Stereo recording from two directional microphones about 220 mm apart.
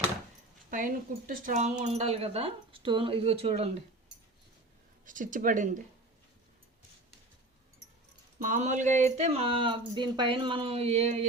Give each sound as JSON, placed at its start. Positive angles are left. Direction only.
{"t": 0.7, "sound": "speech", "side_deg": -40}
{"t": 5.0, "sound": "speech", "side_deg": -35}
{"t": 8.4, "sound": "speech", "side_deg": -35}